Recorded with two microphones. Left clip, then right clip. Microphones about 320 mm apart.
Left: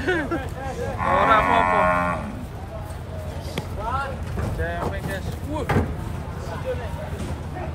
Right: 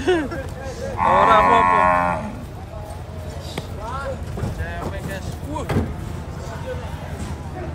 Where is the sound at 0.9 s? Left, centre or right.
Right.